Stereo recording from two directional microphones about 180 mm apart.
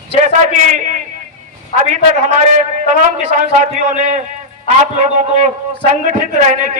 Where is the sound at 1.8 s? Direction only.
40° right (ahead or behind).